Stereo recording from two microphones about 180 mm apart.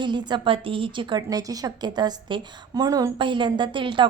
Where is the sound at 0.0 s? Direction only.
25° right (ahead or behind).